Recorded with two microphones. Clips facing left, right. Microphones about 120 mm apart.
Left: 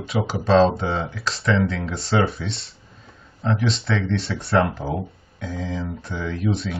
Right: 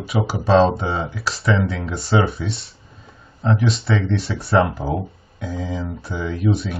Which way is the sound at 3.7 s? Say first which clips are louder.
Right 2 dB; centre (ahead or behind).